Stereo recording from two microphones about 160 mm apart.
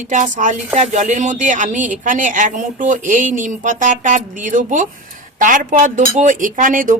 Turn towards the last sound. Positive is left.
turn(degrees=-55)  # may be behind; listen again after turning